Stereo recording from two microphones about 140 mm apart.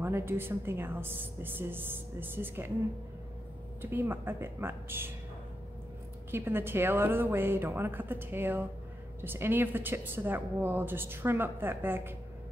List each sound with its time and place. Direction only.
0.0 s a woman's voice: 15° right (ahead or behind)
3.8 s a woman's voice: 15° right (ahead or behind)
6.3 s a woman's voice: 15° right (ahead or behind)